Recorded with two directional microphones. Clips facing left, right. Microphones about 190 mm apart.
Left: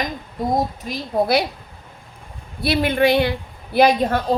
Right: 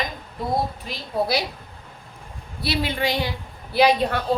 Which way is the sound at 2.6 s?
55° left (ahead or behind).